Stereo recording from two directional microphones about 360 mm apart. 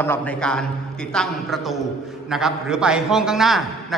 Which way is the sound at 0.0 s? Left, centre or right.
Centre.